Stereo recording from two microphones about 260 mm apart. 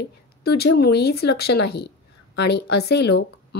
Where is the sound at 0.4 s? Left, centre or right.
Left.